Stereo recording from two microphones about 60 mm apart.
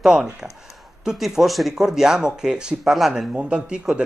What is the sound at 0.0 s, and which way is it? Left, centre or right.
Speech, centre.